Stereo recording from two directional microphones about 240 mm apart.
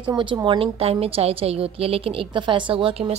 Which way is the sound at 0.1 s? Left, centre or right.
Centre.